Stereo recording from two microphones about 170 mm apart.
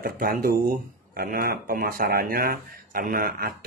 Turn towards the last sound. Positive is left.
turn(degrees=-55)  # may be behind; listen again after turning